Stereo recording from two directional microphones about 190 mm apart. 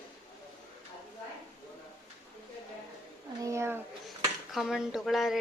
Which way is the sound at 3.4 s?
15° right (ahead or behind).